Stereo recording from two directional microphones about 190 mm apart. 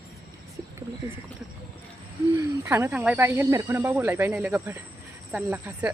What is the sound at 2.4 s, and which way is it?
Speech, 15° right (ahead or behind).